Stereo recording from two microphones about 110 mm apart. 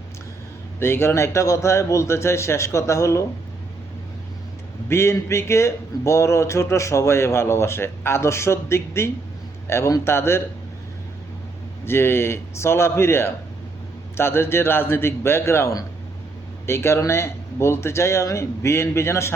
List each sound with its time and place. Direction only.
0.8 s speech: 20° left (ahead or behind)
4.9 s speech: 25° left (ahead or behind)
11.9 s speech: 20° left (ahead or behind)